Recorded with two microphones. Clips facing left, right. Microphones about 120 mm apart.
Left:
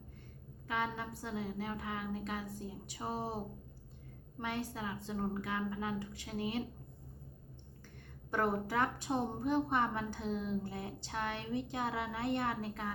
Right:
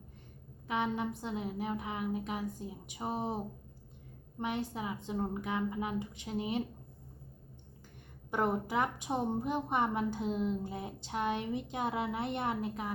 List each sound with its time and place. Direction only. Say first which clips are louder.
0.7 s a woman's voice: right 4 dB; 20° right (ahead or behind)
8.3 s a woman's voice: right 2 dB; 20° right (ahead or behind)